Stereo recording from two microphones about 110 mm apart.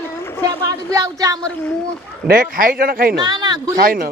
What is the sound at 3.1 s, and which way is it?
Speech, 40° right (ahead or behind).